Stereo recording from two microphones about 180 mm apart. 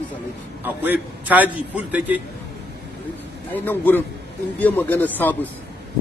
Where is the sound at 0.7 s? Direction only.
10° right (ahead or behind).